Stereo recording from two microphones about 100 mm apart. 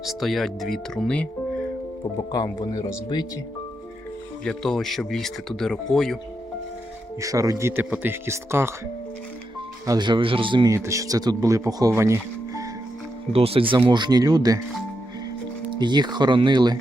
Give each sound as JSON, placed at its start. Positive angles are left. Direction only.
{"t": 0.0, "sound": "speech", "side_deg": 0}
{"t": 2.3, "sound": "speech", "side_deg": 45}
{"t": 4.4, "sound": "speech", "side_deg": 5}
{"t": 7.2, "sound": "speech", "side_deg": -35}
{"t": 10.0, "sound": "speech", "side_deg": -55}
{"t": 10.7, "sound": "speech", "side_deg": -30}
{"t": 11.9, "sound": "music", "side_deg": -25}
{"t": 13.3, "sound": "speech", "side_deg": -75}
{"t": 13.8, "sound": "speech", "side_deg": -50}
{"t": 15.8, "sound": "speech", "side_deg": -45}